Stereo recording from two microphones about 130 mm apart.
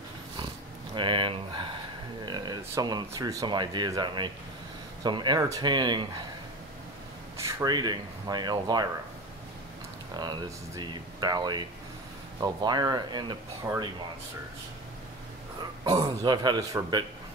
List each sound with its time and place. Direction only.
0.9 s speech: 40° right (ahead or behind)
7.3 s speech: 20° right (ahead or behind)
10.8 s speech: 30° right (ahead or behind)
15.8 s speech: 35° right (ahead or behind)